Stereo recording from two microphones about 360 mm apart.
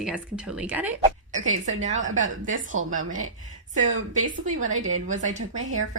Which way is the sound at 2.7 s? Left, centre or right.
Right.